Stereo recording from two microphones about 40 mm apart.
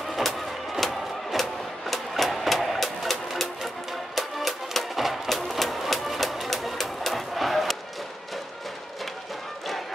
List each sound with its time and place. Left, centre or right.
0.1 s music: centre